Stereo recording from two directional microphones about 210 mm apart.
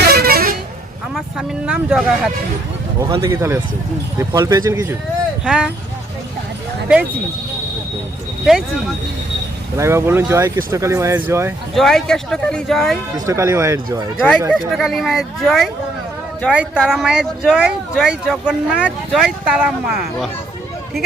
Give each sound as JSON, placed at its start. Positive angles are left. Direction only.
{"t": 0.0, "sound": "vehicle", "side_deg": -45}
{"t": 1.1, "sound": "speech", "side_deg": -5}
{"t": 3.0, "sound": "speech", "side_deg": -15}
{"t": 9.7, "sound": "speech", "side_deg": -15}
{"t": 11.7, "sound": "speech", "side_deg": 0}
{"t": 13.1, "sound": "speech", "side_deg": -15}
{"t": 14.2, "sound": "speech", "side_deg": 0}